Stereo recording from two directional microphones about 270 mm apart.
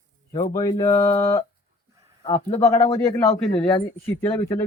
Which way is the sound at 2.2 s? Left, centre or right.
Left.